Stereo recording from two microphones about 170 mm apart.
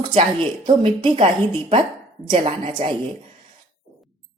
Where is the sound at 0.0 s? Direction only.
30° right (ahead or behind).